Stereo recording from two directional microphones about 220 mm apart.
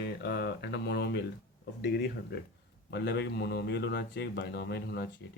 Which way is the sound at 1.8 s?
50° left (ahead or behind).